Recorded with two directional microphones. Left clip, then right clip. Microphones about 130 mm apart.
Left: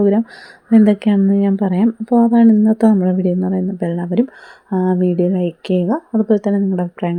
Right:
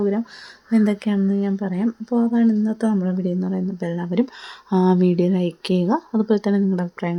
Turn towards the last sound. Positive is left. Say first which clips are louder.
# left 4 dB
turn(degrees=20)  # may be behind; listen again after turning